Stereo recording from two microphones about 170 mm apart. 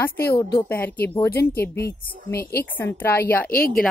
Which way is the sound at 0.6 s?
10° left (ahead or behind).